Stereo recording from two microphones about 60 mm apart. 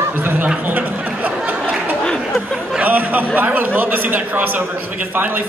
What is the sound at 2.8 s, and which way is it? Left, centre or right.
A man's voice, right.